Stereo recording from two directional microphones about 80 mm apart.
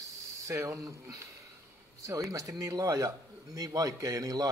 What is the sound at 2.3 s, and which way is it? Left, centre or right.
A man's voice, right.